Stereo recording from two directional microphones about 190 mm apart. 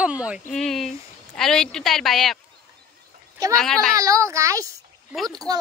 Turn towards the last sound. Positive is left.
turn(degrees=-20)  # may be behind; listen again after turning